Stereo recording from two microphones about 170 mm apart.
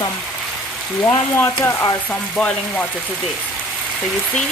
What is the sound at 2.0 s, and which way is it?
A woman's voice, 5° left (ahead or behind).